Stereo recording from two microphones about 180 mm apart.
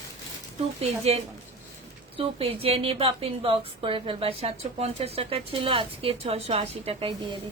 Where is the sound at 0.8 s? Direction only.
35° right (ahead or behind).